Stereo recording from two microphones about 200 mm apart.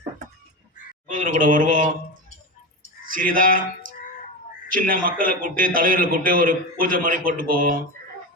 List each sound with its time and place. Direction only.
1.0 s speech: 40° right (ahead or behind)
3.1 s a sound: 45° right (ahead or behind)
4.7 s a man's voice: 45° right (ahead or behind)